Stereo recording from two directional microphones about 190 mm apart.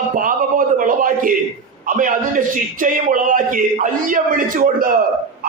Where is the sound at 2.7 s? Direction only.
45° right (ahead or behind).